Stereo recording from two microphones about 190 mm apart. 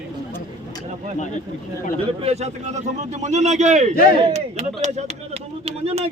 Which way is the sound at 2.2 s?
35° right (ahead or behind).